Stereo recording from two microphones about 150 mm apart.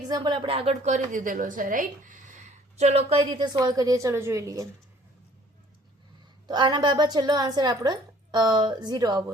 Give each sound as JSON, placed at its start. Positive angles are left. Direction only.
{"t": 0.1, "sound": "a woman's voice", "side_deg": -30}
{"t": 2.7, "sound": "a woman's voice", "side_deg": -45}
{"t": 3.2, "sound": "a woman's voice", "side_deg": -30}
{"t": 6.5, "sound": "a woman's voice", "side_deg": -30}